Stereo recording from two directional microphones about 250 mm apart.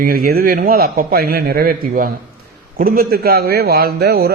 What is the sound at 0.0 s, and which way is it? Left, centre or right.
Speech, right.